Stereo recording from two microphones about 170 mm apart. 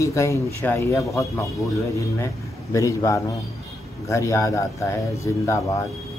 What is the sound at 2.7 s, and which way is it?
Speech, 20° left (ahead or behind).